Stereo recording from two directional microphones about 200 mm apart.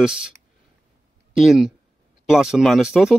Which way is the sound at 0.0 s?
5° right (ahead or behind).